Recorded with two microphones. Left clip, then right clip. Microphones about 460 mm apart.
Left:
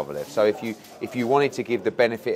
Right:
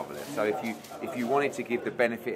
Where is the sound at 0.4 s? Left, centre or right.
Left.